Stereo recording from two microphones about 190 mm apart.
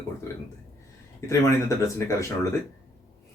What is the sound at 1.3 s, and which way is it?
Speech, 15° left (ahead or behind).